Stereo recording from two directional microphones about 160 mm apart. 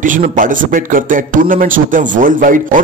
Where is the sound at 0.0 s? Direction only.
55° right (ahead or behind).